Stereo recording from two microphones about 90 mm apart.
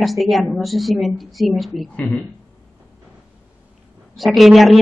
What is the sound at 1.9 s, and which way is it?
Speech, 15° left (ahead or behind).